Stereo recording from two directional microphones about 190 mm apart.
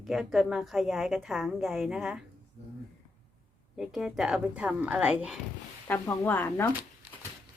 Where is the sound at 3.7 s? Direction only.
Centre (ahead or behind).